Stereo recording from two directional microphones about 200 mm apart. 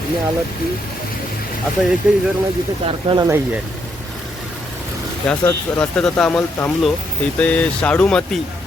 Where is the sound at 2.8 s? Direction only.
25° right (ahead or behind).